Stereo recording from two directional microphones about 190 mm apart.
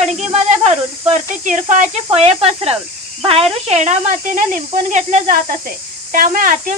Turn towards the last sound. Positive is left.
turn(degrees=-45)  # may be behind; listen again after turning